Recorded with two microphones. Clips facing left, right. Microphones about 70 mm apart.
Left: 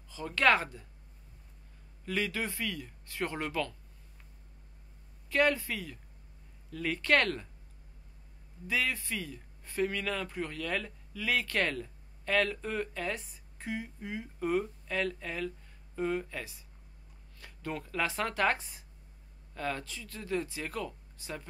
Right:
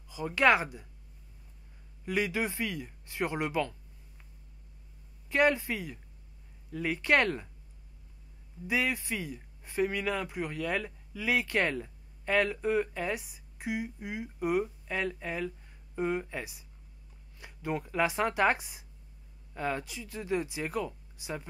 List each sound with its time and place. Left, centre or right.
0.1 s speech: centre
2.0 s speech: centre
5.3 s speech: centre
8.6 s speech: centre